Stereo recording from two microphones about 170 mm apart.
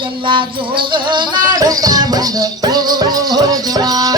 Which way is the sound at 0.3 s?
30° right (ahead or behind).